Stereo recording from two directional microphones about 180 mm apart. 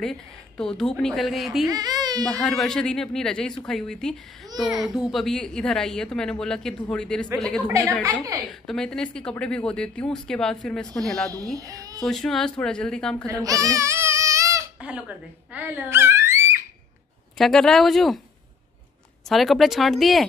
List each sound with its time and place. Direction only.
0.0 s speech: 5° left (ahead or behind)
1.7 s speech: 20° right (ahead or behind)
2.2 s speech: centre (ahead or behind)
7.6 s a woman's voice: 15° right (ahead or behind)
8.5 s speech: centre (ahead or behind)
11.2 s speech: 20° right (ahead or behind)
12.0 s speech: centre (ahead or behind)
13.3 s crying: 20° right (ahead or behind)
14.8 s speech: 5° right (ahead or behind)
17.4 s speech: centre (ahead or behind)
19.2 s speech: centre (ahead or behind)